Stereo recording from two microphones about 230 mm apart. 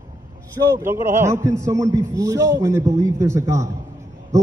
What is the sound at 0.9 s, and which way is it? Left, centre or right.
A man's voice, centre.